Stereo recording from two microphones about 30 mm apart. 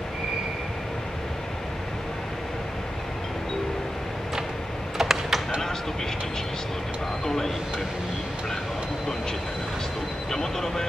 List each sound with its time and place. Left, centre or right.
4.9 s typing: centre
7.2 s speech: centre
10.3 s speech: centre